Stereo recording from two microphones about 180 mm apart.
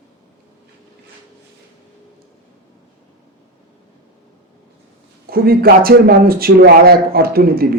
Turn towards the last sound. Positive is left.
turn(degrees=-55)  # may be behind; listen again after turning